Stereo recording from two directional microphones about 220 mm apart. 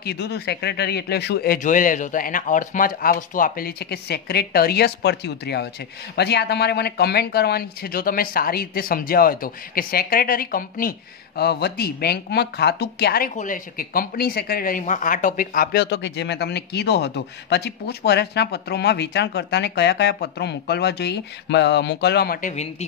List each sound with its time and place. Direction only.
0.0 s speech: 45° left (ahead or behind); by 22.8 s 30° left (ahead or behind)